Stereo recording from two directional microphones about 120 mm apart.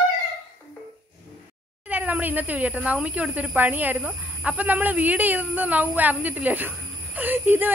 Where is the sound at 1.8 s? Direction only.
10° right (ahead or behind).